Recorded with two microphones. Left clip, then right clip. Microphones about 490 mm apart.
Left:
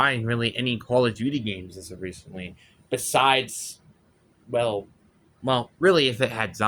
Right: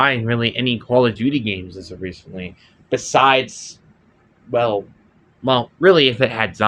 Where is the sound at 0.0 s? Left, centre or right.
Left.